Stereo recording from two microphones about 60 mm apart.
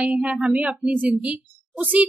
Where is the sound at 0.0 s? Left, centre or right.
Centre.